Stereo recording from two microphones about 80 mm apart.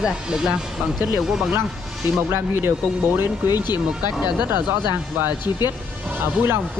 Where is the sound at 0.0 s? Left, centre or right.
Centre.